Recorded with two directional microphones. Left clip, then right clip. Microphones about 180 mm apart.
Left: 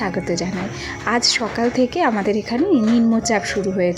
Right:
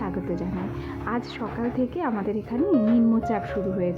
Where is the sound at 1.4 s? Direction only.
30° left (ahead or behind).